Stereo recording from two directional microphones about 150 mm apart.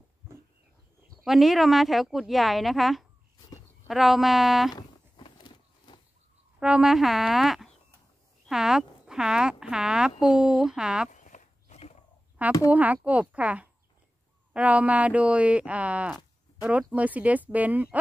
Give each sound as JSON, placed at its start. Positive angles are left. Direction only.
{"t": 1.2, "sound": "speech", "side_deg": 0}
{"t": 4.7, "sound": "a sound", "side_deg": 30}
{"t": 6.6, "sound": "speech", "side_deg": -5}
{"t": 11.1, "sound": "walk", "side_deg": 55}
{"t": 12.4, "sound": "speech", "side_deg": -10}